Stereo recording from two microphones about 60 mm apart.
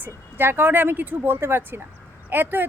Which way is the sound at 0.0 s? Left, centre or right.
Right.